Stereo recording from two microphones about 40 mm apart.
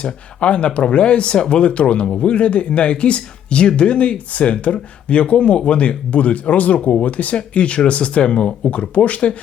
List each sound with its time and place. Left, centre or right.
0.0 s speech: left